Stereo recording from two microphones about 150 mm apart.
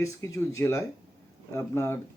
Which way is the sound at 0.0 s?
20° left (ahead or behind).